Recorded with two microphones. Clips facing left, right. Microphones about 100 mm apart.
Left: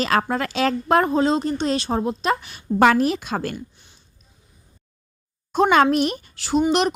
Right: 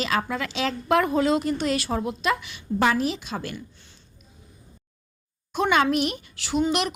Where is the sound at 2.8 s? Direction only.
60° left (ahead or behind).